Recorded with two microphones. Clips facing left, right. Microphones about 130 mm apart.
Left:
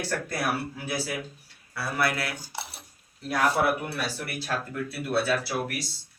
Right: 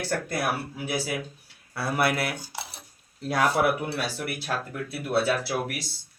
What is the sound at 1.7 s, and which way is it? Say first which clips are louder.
Speech: right 3 dB; 25° right (ahead or behind).